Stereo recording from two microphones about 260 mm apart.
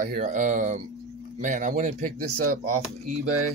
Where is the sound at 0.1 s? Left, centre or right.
Right.